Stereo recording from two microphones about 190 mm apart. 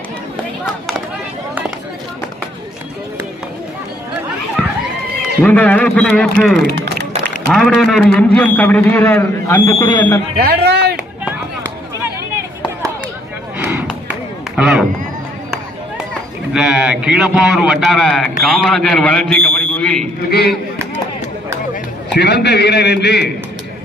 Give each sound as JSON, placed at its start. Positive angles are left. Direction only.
{"t": 5.4, "sound": "a man's voice", "side_deg": 10}
{"t": 10.3, "sound": "speech", "side_deg": -55}
{"t": 13.6, "sound": "a sound", "side_deg": -10}
{"t": 14.6, "sound": "speech", "side_deg": -5}
{"t": 16.5, "sound": "speech", "side_deg": -5}
{"t": 20.2, "sound": "a man's voice", "side_deg": 55}
{"t": 22.1, "sound": "a man's voice", "side_deg": 60}